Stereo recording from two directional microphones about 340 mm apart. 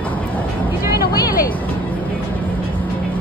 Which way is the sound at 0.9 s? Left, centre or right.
Left.